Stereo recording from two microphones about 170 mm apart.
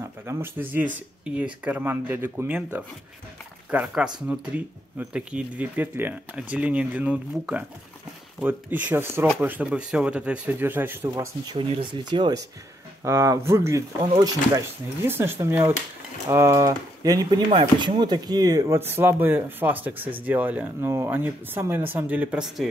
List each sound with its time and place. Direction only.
0.3 s speech: 15° right (ahead or behind)
11.4 s speech: 30° right (ahead or behind)
15.0 s speech: 15° right (ahead or behind)